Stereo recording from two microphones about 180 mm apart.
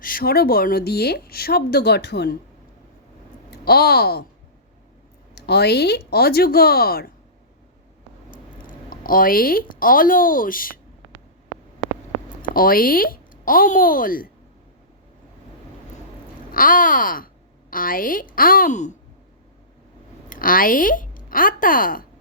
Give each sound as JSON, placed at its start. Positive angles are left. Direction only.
{"t": 0.0, "sound": "speech", "side_deg": 55}
{"t": 3.5, "sound": "speech", "side_deg": 60}
{"t": 5.3, "sound": "speech", "side_deg": 65}
{"t": 8.6, "sound": "speech", "side_deg": 50}
{"t": 12.4, "sound": "a woman's voice", "side_deg": 50}
{"t": 16.5, "sound": "speech", "side_deg": 50}
{"t": 20.3, "sound": "speech", "side_deg": 50}